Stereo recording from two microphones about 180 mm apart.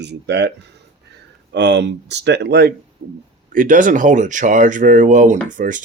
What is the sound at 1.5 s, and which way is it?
Speech, 70° right (ahead or behind).